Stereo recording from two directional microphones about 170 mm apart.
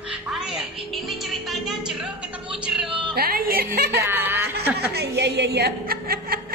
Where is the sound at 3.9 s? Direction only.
15° right (ahead or behind).